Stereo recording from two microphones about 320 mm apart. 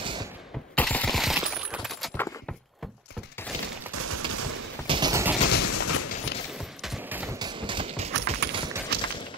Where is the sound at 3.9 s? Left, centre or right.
Right.